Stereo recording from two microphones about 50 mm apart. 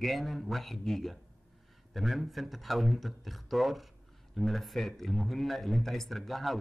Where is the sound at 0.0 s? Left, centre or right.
Centre.